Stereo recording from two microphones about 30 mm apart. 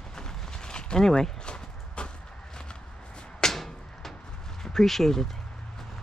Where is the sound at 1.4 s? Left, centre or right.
Left.